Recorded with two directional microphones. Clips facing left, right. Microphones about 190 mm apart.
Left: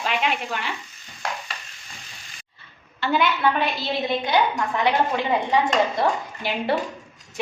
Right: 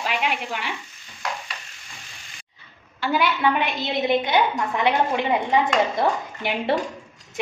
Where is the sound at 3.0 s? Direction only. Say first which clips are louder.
Even; 5° right (ahead or behind).